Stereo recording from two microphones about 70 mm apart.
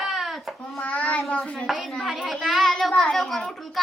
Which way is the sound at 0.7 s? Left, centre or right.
Centre.